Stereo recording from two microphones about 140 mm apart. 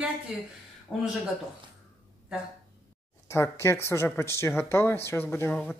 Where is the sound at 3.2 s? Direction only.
20° left (ahead or behind).